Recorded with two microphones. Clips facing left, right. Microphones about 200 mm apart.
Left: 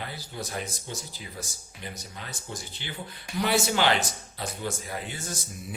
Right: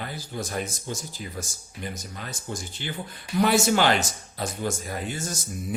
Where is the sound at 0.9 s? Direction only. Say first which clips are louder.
Right 5 dB; 45° right (ahead or behind).